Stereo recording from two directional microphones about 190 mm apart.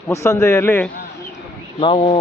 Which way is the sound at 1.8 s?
25° left (ahead or behind).